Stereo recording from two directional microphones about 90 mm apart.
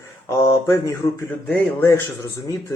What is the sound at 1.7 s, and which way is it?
Speech, 25° left (ahead or behind).